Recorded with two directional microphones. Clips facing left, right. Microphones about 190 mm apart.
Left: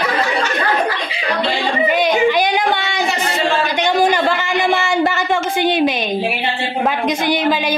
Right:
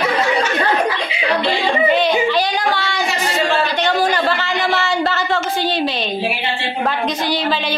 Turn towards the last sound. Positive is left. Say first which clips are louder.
# left 3 dB
turn(degrees=15)  # may be behind; listen again after turning